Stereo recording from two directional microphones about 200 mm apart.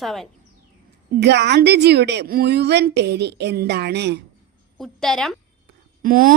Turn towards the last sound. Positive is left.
turn(degrees=-45)  # may be behind; listen again after turning